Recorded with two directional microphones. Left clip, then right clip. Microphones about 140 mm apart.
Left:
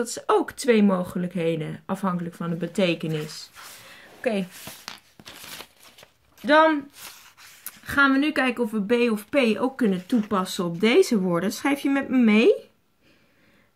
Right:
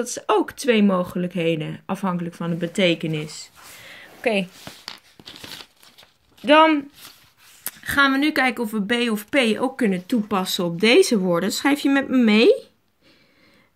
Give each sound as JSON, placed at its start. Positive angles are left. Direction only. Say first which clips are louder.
{"t": 0.0, "sound": "speech", "louder": "right 2 dB", "side_deg": -15}
{"t": 3.9, "sound": "a sound", "louder": "right 5 dB", "side_deg": -20}
{"t": 6.4, "sound": "speech", "louder": "right 3 dB", "side_deg": -20}
{"t": 7.8, "sound": "a woman's voice", "louder": "right 2 dB", "side_deg": -30}